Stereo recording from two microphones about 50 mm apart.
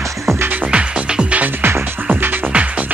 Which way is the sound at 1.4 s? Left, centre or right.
Right.